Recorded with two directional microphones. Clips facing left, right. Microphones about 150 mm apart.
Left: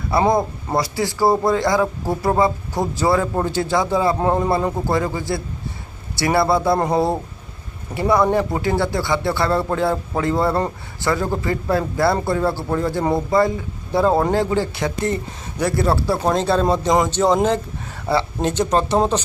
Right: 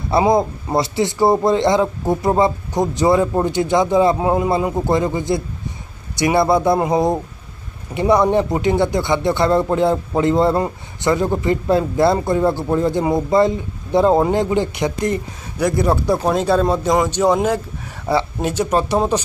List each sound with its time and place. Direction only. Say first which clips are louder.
0.2 s speech: right 2 dB; 20° right (ahead or behind)